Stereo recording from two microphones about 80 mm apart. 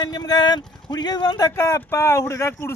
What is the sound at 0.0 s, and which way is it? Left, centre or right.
Speech, left.